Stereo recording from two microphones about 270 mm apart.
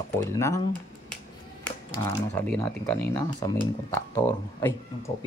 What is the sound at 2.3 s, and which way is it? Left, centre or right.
Speech, centre.